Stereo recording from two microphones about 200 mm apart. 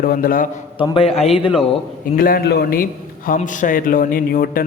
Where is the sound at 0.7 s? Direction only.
25° left (ahead or behind).